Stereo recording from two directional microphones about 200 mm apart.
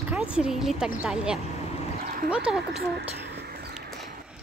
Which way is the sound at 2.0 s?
45° right (ahead or behind).